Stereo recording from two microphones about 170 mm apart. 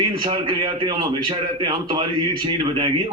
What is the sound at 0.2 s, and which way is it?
A man's voice, 30° right (ahead or behind).